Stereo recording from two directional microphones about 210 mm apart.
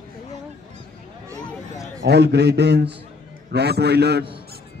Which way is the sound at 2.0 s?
50° right (ahead or behind).